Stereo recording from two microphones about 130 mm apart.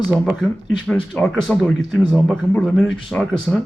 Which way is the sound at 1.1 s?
Centre (ahead or behind).